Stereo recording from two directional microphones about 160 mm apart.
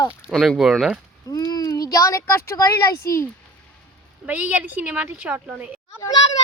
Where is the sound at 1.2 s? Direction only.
25° left (ahead or behind).